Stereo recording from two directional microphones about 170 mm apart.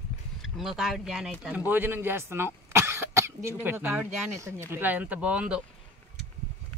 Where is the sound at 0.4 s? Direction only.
Centre (ahead or behind).